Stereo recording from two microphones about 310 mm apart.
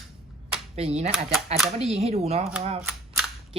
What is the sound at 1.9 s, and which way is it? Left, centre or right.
Speech, centre.